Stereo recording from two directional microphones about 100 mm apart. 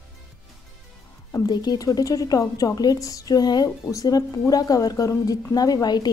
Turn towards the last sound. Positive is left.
turn(degrees=45)  # may be behind; listen again after turning